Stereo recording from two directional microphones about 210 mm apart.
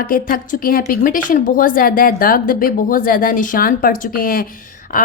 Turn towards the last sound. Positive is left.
turn(degrees=40)  # may be behind; listen again after turning